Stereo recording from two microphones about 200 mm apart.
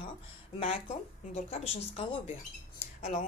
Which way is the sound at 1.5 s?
30° left (ahead or behind).